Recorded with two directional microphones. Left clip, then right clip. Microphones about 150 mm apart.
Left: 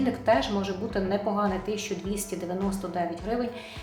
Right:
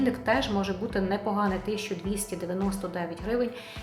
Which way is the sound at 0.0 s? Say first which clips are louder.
Left 2 dB; 40° right (ahead or behind).